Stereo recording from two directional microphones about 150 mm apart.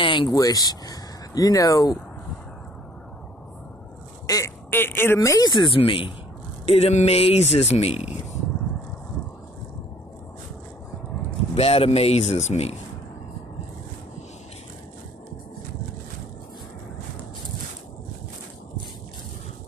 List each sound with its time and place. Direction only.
0.0 s speech: 35° left (ahead or behind)
4.3 s speech: 20° left (ahead or behind); by 8.0 s 45° left (ahead or behind)
11.5 s speech: 40° left (ahead or behind)